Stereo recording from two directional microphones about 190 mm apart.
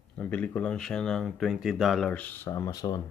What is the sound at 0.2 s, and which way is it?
Speech, 5° left (ahead or behind).